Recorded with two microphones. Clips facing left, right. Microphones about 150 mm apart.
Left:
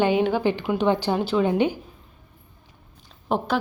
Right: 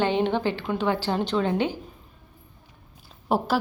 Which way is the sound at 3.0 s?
5° right (ahead or behind).